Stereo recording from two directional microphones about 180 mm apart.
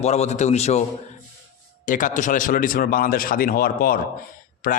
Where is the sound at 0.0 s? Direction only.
35° left (ahead or behind).